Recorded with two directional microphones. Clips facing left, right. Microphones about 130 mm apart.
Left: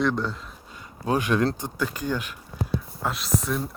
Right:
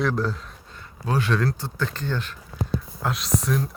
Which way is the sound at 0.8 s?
15° left (ahead or behind).